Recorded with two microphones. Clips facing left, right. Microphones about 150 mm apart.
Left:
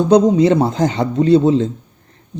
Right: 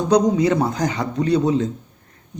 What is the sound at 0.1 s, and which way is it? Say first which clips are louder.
A man's voice: left 4 dB; 25° left (ahead or behind).